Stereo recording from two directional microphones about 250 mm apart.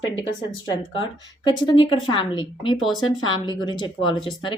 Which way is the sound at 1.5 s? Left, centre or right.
Centre.